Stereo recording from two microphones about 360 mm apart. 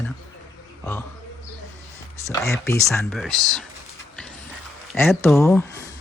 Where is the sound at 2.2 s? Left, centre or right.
Centre.